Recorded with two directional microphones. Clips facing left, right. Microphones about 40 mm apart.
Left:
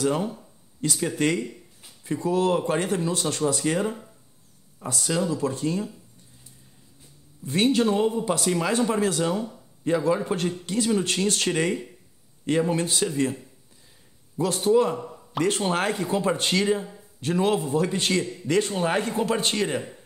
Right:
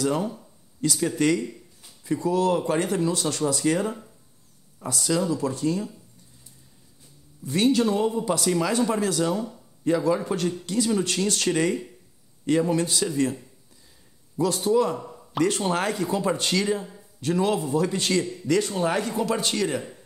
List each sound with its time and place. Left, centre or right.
0.7 s speech: left
4.8 s speech: left
7.4 s speech: left
14.4 s speech: left